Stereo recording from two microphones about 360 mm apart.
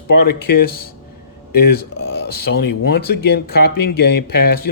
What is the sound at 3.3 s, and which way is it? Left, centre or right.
A man's voice, left.